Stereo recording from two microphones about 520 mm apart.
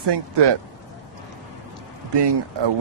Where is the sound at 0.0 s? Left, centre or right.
Right.